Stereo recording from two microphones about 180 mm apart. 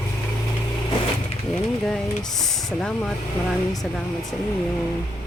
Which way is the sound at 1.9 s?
Centre (ahead or behind).